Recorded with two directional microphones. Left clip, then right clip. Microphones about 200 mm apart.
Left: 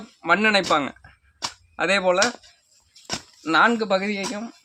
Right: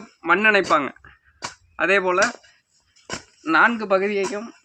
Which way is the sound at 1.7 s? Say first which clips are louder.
Right 1 dB; 45° left (ahead or behind).